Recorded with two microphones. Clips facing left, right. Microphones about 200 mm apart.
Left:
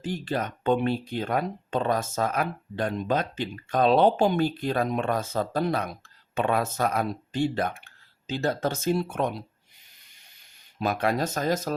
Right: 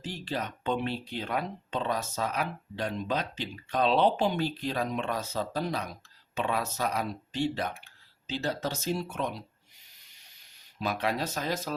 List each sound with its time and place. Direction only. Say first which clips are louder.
0.0 s speech: left 5 dB; 50° left (ahead or behind)
10.8 s speech: left 5 dB; 50° left (ahead or behind)